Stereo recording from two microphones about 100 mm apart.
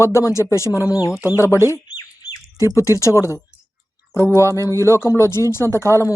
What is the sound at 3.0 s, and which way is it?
Speech, 30° left (ahead or behind).